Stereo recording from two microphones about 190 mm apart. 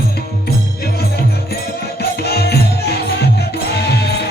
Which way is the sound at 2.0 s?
55° left (ahead or behind).